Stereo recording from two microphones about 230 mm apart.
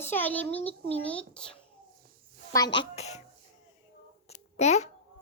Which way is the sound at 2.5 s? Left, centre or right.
Centre.